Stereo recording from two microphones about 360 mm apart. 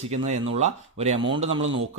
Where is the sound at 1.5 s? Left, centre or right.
Right.